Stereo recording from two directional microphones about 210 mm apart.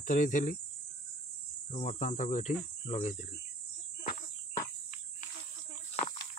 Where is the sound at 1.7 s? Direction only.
35° left (ahead or behind).